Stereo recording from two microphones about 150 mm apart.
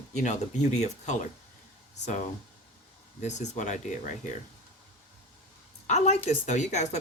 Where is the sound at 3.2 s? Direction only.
50° left (ahead or behind).